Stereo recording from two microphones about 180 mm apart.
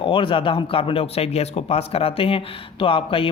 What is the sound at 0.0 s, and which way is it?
Speech, 30° left (ahead or behind).